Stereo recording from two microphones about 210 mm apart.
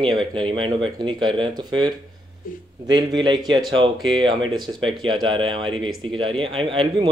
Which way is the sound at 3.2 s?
20° right (ahead or behind).